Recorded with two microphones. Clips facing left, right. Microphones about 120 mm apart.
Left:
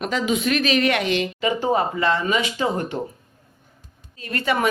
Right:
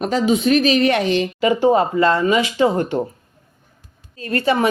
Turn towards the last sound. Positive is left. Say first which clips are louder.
# right 4 dB
turn(degrees=-30)  # may be behind; listen again after turning